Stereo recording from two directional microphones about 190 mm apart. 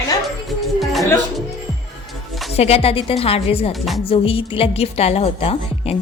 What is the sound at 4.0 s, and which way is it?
A woman's voice, 30° left (ahead or behind).